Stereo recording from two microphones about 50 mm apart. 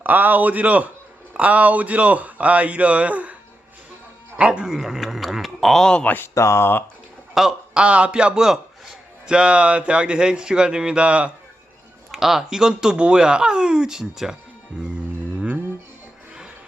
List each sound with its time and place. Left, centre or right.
0.0 s a man's voice: right
4.4 s speech: centre
4.7 s a sound: centre
5.8 s speech: centre
6.3 s speech: left
7.3 s a man's voice: centre
12.1 s speech: centre